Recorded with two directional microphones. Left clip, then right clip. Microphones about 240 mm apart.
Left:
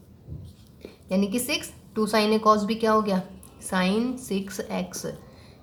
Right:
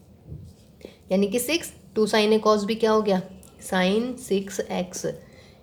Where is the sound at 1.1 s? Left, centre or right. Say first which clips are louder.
Right 3 dB; right.